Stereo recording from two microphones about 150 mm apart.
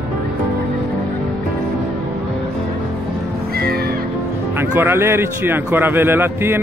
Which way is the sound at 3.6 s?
90° right.